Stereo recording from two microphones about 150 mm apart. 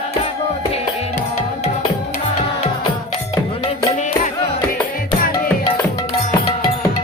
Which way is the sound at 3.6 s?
50° left (ahead or behind).